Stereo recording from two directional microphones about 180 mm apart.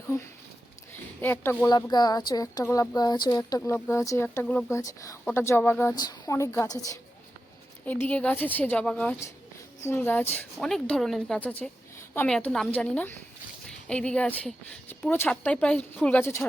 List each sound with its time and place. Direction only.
1.2 s speech: 10° left (ahead or behind)
3.6 s speech: 10° left (ahead or behind)